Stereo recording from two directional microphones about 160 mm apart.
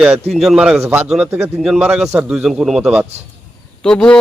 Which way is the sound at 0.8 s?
15° right (ahead or behind).